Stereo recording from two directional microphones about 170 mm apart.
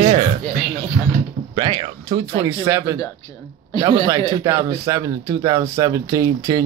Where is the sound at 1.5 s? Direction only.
30° right (ahead or behind).